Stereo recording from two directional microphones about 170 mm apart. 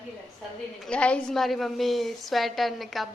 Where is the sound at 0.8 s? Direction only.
5° left (ahead or behind).